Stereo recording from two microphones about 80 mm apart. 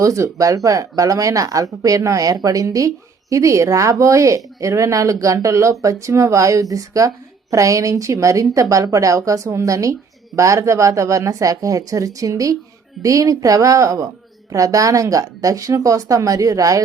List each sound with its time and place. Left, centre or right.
0.0 s speech: right